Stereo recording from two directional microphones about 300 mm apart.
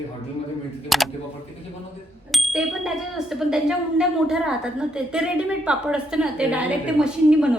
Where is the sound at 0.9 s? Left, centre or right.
Centre.